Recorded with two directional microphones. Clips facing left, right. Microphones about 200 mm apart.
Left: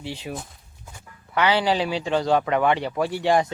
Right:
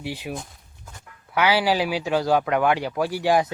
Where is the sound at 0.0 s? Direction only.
10° right (ahead or behind).